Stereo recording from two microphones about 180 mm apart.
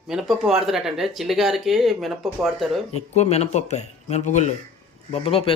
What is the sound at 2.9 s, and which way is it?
A man's voice, 35° left (ahead or behind).